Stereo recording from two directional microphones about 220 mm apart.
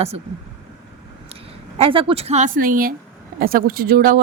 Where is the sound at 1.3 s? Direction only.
25° right (ahead or behind).